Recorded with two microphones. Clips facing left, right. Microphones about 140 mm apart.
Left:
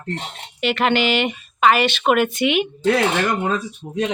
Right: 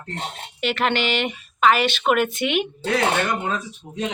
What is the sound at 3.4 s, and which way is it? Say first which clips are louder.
Speech: left 4 dB; 65° left (ahead or behind).